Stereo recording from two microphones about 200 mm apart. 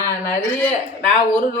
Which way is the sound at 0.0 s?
15° left (ahead or behind).